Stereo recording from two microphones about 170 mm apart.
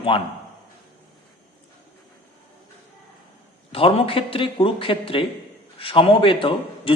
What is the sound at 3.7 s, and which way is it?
A man's voice, 35° left (ahead or behind).